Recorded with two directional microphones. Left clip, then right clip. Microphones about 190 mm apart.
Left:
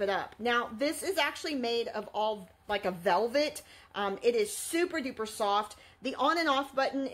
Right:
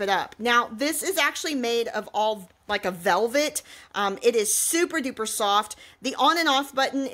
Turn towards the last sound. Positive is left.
turn(degrees=-40)  # may be behind; listen again after turning